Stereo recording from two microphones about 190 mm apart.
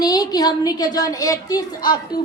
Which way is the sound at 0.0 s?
20° left (ahead or behind).